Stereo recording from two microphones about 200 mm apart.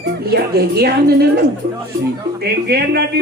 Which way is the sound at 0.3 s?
50° right (ahead or behind).